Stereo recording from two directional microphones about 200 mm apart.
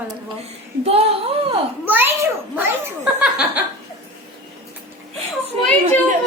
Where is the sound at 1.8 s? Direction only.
10° right (ahead or behind).